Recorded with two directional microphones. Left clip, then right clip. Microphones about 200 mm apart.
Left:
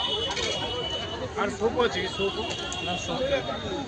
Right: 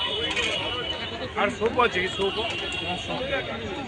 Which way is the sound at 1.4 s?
40° right (ahead or behind).